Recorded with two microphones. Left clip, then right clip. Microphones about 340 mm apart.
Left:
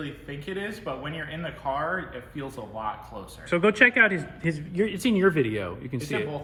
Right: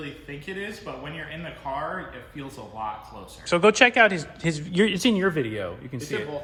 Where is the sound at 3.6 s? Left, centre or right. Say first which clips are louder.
Right 2 dB; centre.